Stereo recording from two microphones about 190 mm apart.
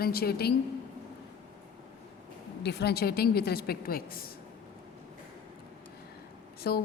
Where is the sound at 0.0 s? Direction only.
55° left (ahead or behind).